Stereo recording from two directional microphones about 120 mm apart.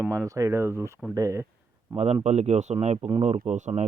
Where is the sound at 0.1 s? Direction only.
25° right (ahead or behind).